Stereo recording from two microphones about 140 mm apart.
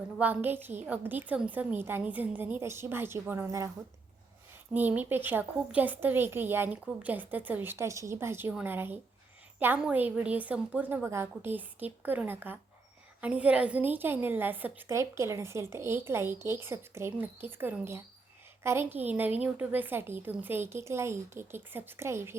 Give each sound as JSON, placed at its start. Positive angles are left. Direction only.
{"t": 0.2, "sound": "a woman's voice", "side_deg": -15}
{"t": 4.7, "sound": "a woman's voice", "side_deg": -10}